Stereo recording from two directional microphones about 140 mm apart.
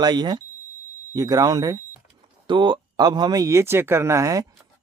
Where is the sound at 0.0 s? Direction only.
30° right (ahead or behind).